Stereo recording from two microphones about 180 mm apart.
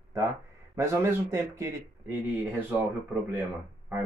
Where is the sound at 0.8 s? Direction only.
15° right (ahead or behind).